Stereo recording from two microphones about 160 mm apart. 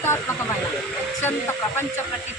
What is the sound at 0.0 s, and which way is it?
Hiss, 15° left (ahead or behind).